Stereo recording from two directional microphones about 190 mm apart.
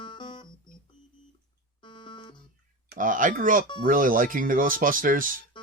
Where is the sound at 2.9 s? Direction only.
45° right (ahead or behind).